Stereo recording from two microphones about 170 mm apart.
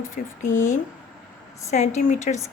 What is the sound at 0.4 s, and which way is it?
A woman's voice, 50° left (ahead or behind).